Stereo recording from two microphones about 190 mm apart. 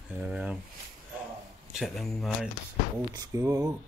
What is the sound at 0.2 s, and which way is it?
Speech, 5° right (ahead or behind).